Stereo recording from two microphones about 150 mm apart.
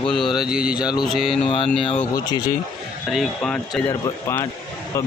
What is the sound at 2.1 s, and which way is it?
Speech, 30° left (ahead or behind).